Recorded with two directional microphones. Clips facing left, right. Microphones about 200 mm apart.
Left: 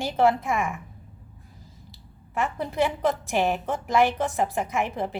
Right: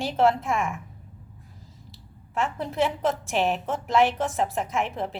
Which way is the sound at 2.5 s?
Centre (ahead or behind).